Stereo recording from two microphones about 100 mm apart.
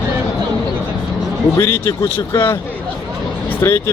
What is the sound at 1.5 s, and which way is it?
Speech, 25° left (ahead or behind).